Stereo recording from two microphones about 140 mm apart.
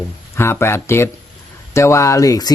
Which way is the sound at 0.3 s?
15° left (ahead or behind).